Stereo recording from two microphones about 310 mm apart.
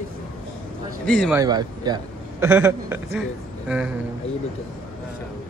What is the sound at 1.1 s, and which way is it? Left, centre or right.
Speech, centre.